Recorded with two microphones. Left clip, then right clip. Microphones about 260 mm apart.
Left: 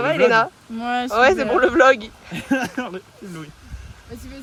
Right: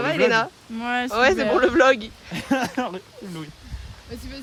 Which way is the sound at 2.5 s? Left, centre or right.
Right.